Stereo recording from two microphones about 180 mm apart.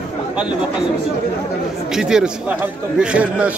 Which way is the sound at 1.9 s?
5° right (ahead or behind).